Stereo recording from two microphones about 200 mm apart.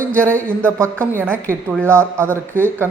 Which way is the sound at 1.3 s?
10° right (ahead or behind).